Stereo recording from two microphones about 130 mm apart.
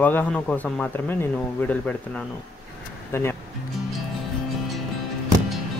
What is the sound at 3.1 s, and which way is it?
Speech, 20° left (ahead or behind).